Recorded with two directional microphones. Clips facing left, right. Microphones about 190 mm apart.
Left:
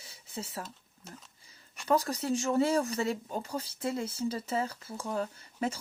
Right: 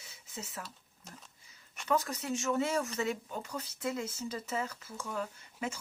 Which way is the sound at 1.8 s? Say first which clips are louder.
Left 4 dB; 35° left (ahead or behind).